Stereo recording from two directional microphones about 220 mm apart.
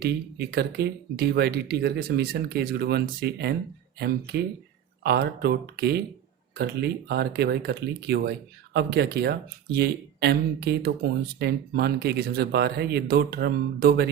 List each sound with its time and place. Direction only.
0.0 s speech: 45° right (ahead or behind)